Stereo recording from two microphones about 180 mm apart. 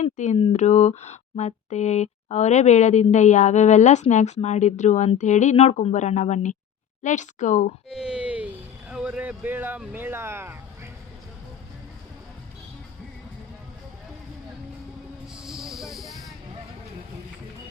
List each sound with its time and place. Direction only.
0.0 s speech: 40° left (ahead or behind)
7.9 s speech: 5° right (ahead or behind)
15.4 s hiss: centre (ahead or behind)